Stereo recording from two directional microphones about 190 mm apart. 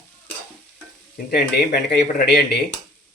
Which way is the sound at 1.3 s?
55° left (ahead or behind).